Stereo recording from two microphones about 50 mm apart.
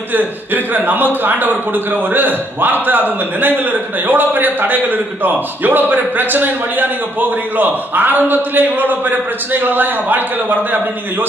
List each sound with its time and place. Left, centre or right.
0.1 s a man's voice: right